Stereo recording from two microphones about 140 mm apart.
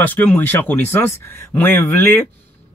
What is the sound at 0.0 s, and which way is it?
Speech, 15° left (ahead or behind).